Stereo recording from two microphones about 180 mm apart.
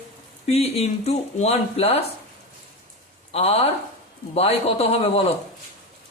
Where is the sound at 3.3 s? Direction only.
35° left (ahead or behind).